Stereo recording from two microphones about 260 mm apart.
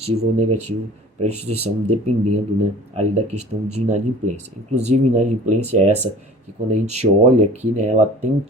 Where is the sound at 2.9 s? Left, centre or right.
Right.